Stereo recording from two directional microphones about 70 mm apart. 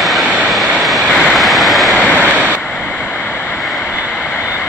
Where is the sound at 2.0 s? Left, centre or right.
Right.